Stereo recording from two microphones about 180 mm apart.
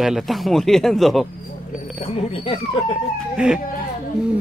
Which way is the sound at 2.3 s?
30° left (ahead or behind).